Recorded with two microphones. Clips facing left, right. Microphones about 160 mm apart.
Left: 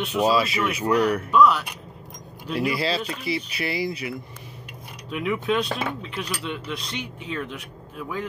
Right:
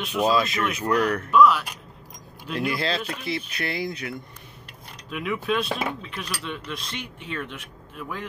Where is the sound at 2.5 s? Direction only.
5° left (ahead or behind).